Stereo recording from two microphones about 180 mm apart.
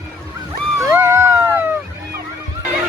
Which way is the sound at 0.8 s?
15° right (ahead or behind).